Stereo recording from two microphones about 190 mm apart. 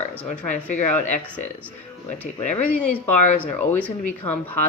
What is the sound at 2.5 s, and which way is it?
Speech, 10° left (ahead or behind).